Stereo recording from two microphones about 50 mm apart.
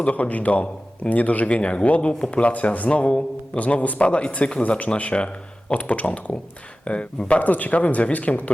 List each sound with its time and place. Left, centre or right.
0.0 s speech: left